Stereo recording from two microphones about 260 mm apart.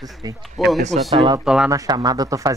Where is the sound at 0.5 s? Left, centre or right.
Centre.